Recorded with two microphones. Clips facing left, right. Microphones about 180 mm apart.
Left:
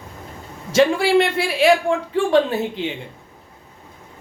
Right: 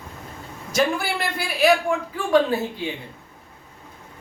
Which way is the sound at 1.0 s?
25° left (ahead or behind).